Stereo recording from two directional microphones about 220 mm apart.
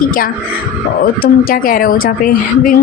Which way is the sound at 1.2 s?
40° left (ahead or behind).